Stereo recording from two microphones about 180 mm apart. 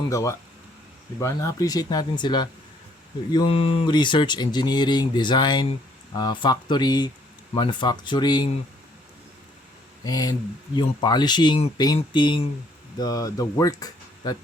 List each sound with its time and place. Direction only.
0.1 s speech: 20° left (ahead or behind)
10.0 s speech: 20° left (ahead or behind)